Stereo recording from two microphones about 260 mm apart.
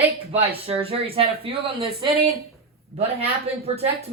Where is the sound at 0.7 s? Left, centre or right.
Right.